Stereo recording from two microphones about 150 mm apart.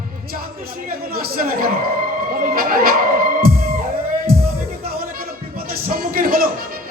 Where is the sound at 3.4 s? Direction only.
75° right (ahead or behind).